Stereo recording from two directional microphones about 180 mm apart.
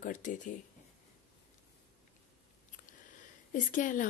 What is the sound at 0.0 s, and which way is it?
Speech, 45° left (ahead or behind).